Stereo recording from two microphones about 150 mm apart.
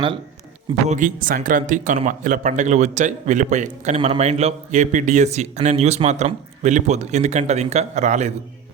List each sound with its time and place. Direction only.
0.9 s speech: 60° right (ahead or behind)